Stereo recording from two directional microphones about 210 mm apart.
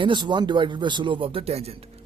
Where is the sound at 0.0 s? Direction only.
20° right (ahead or behind).